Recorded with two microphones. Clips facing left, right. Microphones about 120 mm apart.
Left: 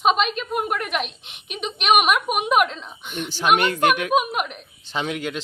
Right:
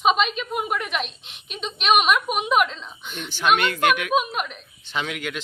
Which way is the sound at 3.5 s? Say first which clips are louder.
Left 3 dB; 30° left (ahead or behind).